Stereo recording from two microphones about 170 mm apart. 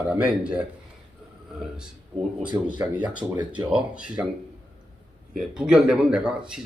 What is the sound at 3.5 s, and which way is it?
Speech, 25° right (ahead or behind).